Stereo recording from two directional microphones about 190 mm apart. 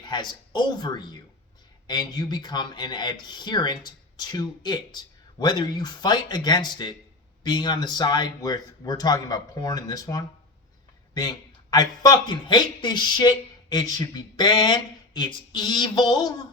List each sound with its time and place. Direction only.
0.0 s a man's voice: 25° left (ahead or behind)